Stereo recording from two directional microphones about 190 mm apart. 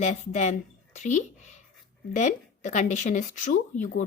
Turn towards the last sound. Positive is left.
turn(degrees=40)  # may be behind; listen again after turning